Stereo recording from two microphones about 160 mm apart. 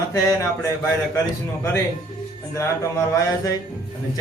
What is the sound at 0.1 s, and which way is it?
Speech, 20° left (ahead or behind).